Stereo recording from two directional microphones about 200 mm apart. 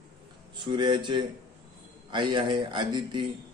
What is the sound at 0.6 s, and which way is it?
Speech, 25° right (ahead or behind).